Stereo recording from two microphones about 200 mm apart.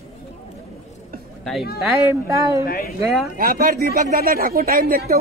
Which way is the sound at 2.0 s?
15° right (ahead or behind).